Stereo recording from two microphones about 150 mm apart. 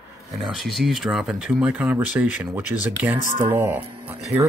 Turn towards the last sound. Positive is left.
turn(degrees=-10)  # may be behind; listen again after turning